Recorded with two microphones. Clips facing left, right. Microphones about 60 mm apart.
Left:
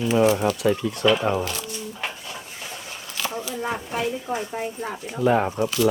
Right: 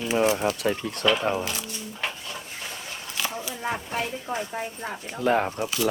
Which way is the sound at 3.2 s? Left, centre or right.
Centre.